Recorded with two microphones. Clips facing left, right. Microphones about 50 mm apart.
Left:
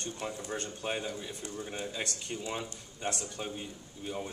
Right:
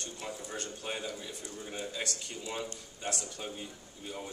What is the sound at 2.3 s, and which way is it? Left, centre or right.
Speech, left.